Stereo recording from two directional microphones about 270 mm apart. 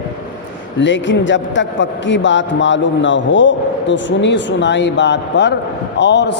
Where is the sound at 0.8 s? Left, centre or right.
Left.